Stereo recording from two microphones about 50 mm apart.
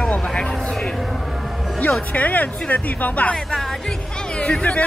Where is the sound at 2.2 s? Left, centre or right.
Left.